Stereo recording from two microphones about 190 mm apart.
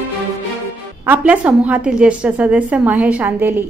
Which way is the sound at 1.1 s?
5° right (ahead or behind).